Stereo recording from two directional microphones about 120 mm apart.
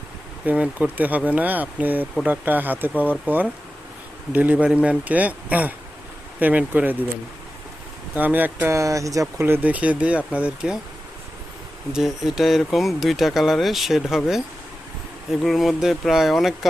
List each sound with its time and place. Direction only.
0.4 s speech: 10° right (ahead or behind)
8.1 s speech: 15° right (ahead or behind)
9.4 s speech: 15° right (ahead or behind)
11.9 s speech: 5° right (ahead or behind)
15.3 s speech: centre (ahead or behind)